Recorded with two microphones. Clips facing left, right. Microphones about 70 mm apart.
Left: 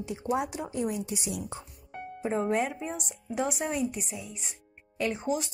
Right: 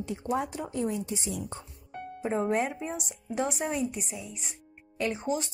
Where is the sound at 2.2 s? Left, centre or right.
Centre.